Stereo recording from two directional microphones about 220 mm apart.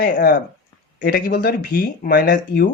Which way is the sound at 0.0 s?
40° left (ahead or behind).